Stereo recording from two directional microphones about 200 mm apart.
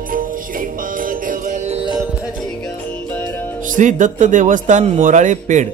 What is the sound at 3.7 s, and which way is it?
A man's voice, 40° right (ahead or behind).